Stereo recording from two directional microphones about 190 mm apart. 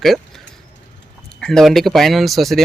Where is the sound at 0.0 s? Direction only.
Centre (ahead or behind).